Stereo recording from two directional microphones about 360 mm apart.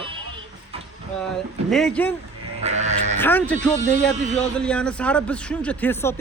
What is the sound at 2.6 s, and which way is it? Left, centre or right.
Sheep, centre.